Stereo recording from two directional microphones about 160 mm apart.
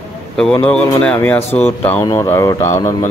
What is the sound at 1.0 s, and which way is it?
Speech, 10° left (ahead or behind).